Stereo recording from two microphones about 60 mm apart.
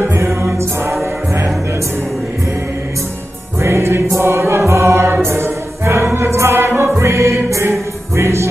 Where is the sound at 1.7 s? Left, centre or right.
Right.